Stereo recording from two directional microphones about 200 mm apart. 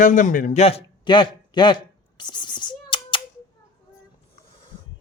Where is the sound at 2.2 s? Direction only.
20° left (ahead or behind).